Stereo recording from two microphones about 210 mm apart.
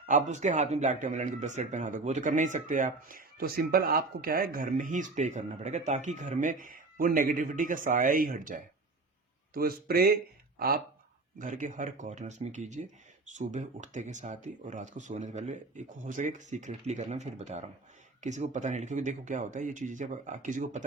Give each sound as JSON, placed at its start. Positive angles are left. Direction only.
{"t": 0.0, "sound": "speech", "side_deg": -35}
{"t": 11.3, "sound": "speech", "side_deg": -40}